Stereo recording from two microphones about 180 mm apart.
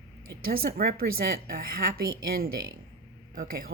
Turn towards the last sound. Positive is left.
turn(degrees=-50)  # may be behind; listen again after turning